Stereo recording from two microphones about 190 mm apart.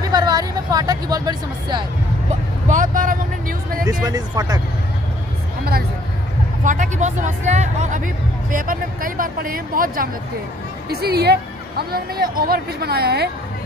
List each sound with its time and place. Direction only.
0.1 s speech: 20° right (ahead or behind)
2.7 s speech: 45° right (ahead or behind)
4.0 s speech: 20° right (ahead or behind)
6.6 s a woman's voice: 40° right (ahead or behind)